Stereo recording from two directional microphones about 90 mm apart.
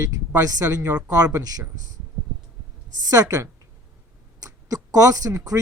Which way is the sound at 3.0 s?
40° right (ahead or behind).